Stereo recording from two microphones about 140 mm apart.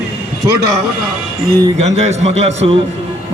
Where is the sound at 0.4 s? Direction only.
30° right (ahead or behind).